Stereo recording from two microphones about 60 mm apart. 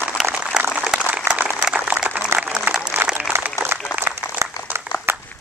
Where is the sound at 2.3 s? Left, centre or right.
Right.